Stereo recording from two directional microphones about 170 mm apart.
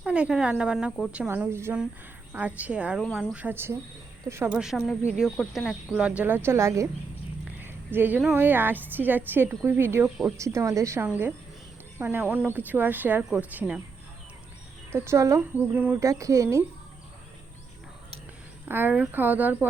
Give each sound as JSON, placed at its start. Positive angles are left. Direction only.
{"t": 0.0, "sound": "a woman's voice", "side_deg": -5}
{"t": 3.3, "sound": "a woman's voice", "side_deg": -10}
{"t": 4.5, "sound": "a woman's voice", "side_deg": -5}
{"t": 14.9, "sound": "a woman's voice", "side_deg": -15}
{"t": 18.7, "sound": "a woman's voice", "side_deg": -10}